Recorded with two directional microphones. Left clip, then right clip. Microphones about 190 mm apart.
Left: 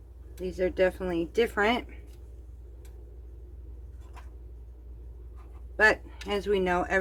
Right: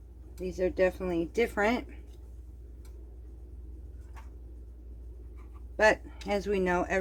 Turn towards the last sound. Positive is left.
turn(degrees=-20)  # may be behind; listen again after turning